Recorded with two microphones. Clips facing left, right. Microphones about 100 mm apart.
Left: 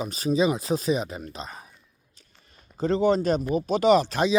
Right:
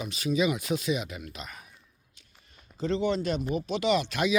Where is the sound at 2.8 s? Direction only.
40° left (ahead or behind).